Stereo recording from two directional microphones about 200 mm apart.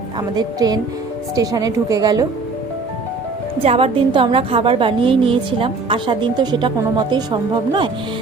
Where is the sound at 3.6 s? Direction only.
30° right (ahead or behind).